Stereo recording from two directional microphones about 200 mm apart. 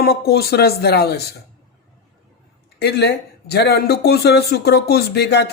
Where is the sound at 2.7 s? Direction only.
55° left (ahead or behind).